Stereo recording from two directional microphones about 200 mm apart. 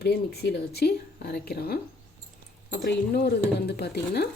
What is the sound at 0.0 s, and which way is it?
A woman's voice, 55° left (ahead or behind).